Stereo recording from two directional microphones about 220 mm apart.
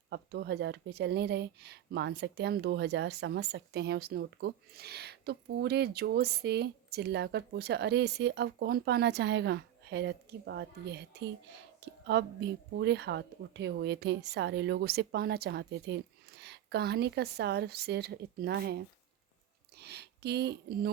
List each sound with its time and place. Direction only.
0.1 s speech: 50° right (ahead or behind)